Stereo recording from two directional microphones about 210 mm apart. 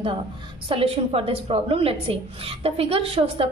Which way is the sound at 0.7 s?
25° right (ahead or behind).